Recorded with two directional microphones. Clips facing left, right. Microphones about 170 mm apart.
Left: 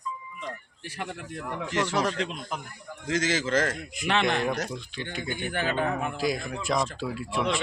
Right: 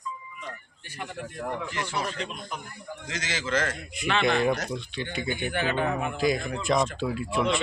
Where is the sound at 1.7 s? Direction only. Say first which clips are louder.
Left 5 dB; 85° left.